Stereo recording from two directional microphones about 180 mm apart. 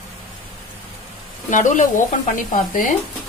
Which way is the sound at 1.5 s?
45° left (ahead or behind).